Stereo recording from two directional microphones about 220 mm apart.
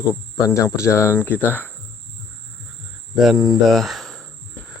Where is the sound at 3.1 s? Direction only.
Centre (ahead or behind).